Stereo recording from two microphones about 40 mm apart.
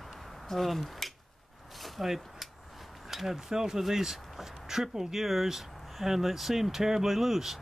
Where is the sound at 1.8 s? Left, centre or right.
Centre.